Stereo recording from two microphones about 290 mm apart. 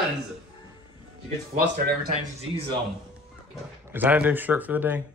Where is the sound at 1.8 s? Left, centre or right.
Right.